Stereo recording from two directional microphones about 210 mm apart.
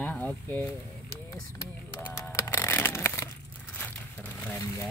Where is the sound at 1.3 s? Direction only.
10° left (ahead or behind).